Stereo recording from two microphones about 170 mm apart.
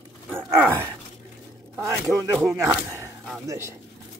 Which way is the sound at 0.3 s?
10° right (ahead or behind).